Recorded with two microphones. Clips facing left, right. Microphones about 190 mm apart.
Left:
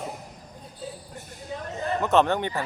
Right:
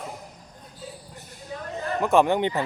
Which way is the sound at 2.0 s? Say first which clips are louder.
Right 2 dB; 10° right (ahead or behind).